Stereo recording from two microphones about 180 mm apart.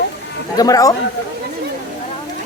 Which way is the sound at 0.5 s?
20° left (ahead or behind).